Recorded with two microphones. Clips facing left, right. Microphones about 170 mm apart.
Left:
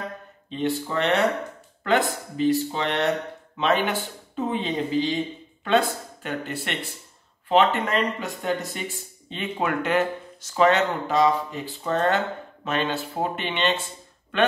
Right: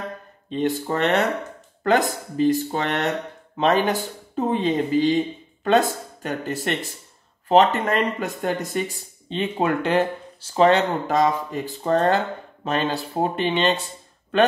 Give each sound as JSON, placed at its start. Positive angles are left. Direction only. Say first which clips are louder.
{"t": 0.5, "sound": "speech", "louder": "right 3 dB", "side_deg": -45}
{"t": 9.3, "sound": "speech", "louder": "right 4 dB", "side_deg": -30}
{"t": 11.1, "sound": "speech", "louder": "right 1 dB", "side_deg": -45}